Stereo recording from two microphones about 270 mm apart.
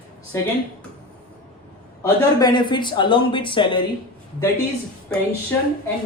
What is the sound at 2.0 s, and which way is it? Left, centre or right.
Speech, centre.